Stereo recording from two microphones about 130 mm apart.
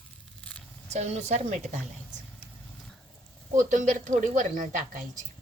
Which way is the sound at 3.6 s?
80° right.